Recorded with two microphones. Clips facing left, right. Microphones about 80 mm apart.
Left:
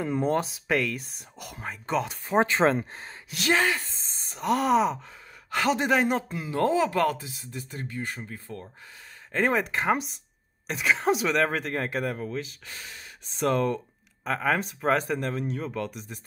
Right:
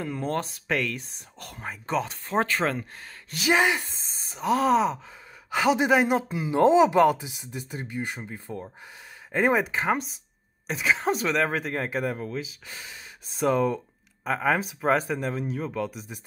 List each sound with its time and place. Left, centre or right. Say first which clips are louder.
0.0 s speech: left 3 dB; centre
2.2 s speech: left 5 dB; centre
3.3 s speech: right 1 dB; centre
3.5 s speech: right 3 dB; centre
3.9 s speech: right 1 dB; centre
6.5 s speech: right 6 dB; centre
9.3 s speech: right 2 dB; centre